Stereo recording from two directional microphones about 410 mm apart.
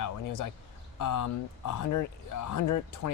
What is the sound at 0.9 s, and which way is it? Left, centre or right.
Speech, left.